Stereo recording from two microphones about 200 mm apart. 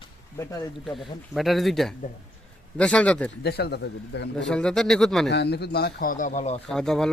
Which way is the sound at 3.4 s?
55° left (ahead or behind).